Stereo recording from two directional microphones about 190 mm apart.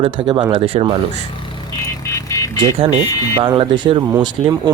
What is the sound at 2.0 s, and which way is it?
Vehicle, 15° left (ahead or behind).